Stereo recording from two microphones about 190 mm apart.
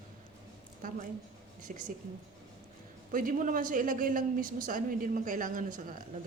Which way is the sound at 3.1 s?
45° right (ahead or behind).